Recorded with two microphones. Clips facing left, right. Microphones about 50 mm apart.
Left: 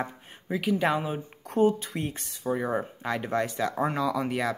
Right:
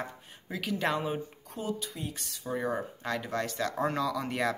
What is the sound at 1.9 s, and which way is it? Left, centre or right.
Speech, left.